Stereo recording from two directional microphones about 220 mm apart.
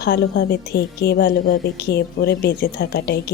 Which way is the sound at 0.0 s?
45° left (ahead or behind).